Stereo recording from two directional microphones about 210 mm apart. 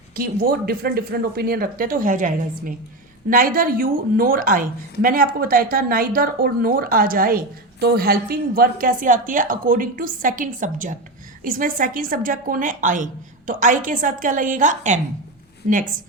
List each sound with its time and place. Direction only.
0.2 s a woman's voice: 45° right (ahead or behind)